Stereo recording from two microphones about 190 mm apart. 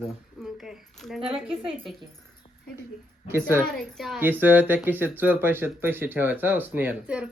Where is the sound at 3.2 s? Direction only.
10° right (ahead or behind).